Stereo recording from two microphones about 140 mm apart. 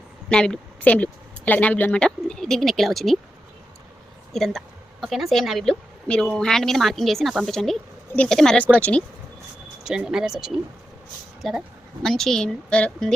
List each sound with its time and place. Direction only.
0.3 s speech: 5° left (ahead or behind)
4.3 s a woman's voice: centre (ahead or behind)
9.8 s speech: 5° right (ahead or behind)